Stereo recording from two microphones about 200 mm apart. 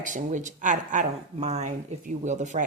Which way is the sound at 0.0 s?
40° right (ahead or behind).